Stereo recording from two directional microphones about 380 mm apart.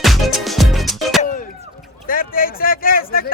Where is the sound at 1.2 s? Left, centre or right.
Left.